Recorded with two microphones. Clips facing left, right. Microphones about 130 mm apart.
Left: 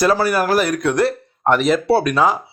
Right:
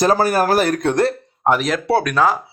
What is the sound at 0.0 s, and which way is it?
Speech, 45° right (ahead or behind).